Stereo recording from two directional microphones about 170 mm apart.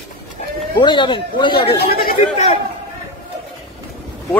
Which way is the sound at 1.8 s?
60° left (ahead or behind).